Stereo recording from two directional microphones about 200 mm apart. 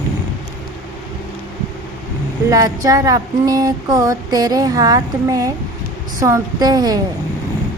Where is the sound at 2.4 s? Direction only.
15° right (ahead or behind).